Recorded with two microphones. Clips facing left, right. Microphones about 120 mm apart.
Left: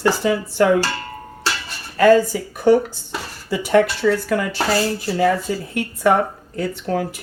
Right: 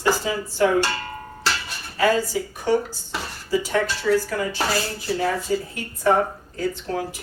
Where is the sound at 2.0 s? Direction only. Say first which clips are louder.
Left 7 dB; 55° left (ahead or behind).